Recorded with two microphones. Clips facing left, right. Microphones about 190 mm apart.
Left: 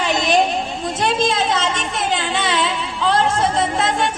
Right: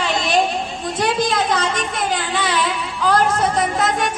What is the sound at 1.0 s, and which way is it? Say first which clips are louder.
Speech: even; 25° left (ahead or behind).